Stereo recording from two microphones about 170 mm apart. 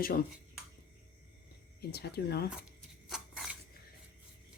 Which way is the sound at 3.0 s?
Centre (ahead or behind).